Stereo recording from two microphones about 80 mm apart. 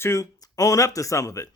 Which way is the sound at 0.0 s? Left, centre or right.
Left.